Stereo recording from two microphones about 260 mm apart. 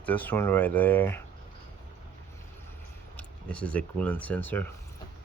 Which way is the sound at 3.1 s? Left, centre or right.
Centre.